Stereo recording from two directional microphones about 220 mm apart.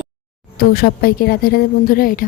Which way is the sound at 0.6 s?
40° left (ahead or behind).